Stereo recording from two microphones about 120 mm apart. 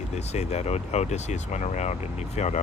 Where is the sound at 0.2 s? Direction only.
65° left (ahead or behind).